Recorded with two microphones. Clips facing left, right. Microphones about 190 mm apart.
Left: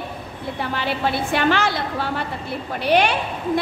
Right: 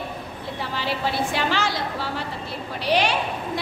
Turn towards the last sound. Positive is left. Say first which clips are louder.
# left 4 dB
turn(degrees=55)  # may be behind; listen again after turning